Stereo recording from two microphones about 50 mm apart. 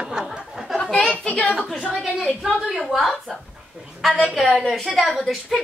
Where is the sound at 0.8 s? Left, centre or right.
Centre.